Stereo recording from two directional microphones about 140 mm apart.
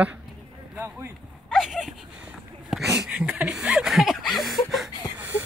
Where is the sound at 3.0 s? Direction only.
5° right (ahead or behind).